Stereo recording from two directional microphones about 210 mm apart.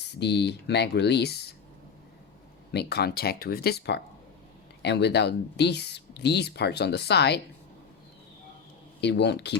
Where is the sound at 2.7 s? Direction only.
50° left (ahead or behind).